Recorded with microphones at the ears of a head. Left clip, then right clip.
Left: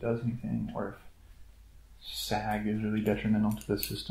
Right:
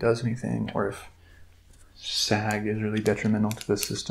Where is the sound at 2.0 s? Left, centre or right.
Right.